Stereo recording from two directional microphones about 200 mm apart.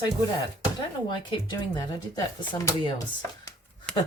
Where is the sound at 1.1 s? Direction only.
20° left (ahead or behind).